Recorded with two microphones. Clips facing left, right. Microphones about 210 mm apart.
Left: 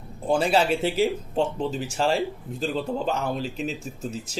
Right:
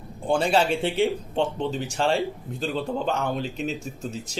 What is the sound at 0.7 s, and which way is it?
Speech, 5° left (ahead or behind).